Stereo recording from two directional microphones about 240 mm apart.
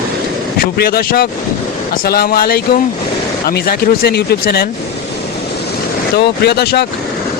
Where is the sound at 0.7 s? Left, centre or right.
Left.